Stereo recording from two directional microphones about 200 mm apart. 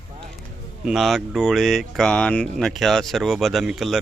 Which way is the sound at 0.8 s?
Centre (ahead or behind).